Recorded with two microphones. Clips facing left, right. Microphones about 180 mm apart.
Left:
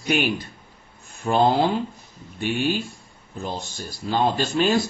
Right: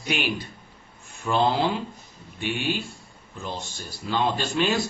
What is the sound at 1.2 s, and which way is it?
A man's voice, 45° left (ahead or behind).